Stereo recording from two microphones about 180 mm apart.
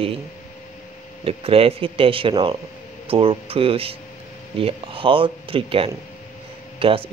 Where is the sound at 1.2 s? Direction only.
30° right (ahead or behind).